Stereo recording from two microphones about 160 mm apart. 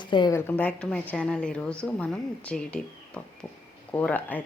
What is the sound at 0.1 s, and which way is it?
Speech, 30° left (ahead or behind).